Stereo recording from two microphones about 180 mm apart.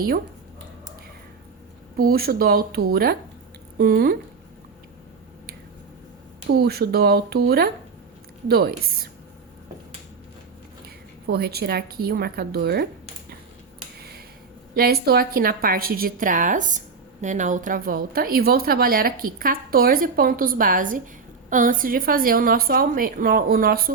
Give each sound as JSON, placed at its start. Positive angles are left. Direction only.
{"t": 2.0, "sound": "speech", "side_deg": -55}
{"t": 6.5, "sound": "speech", "side_deg": -60}
{"t": 10.8, "sound": "a woman's voice", "side_deg": -60}
{"t": 14.8, "sound": "a woman's voice", "side_deg": -60}